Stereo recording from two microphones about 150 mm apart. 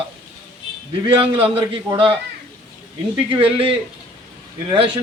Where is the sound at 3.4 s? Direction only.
35° right (ahead or behind).